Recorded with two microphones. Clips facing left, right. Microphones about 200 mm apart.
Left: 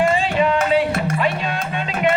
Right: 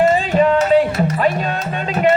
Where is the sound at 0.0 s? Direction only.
40° right (ahead or behind).